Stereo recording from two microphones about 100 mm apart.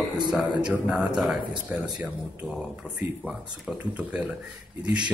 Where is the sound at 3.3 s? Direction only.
10° right (ahead or behind).